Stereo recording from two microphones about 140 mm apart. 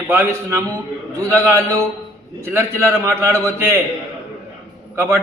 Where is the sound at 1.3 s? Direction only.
20° right (ahead or behind).